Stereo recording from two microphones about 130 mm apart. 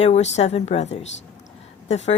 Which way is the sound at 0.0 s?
60° left (ahead or behind).